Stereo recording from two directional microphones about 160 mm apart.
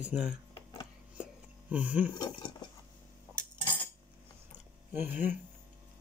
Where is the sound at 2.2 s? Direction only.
25° left (ahead or behind).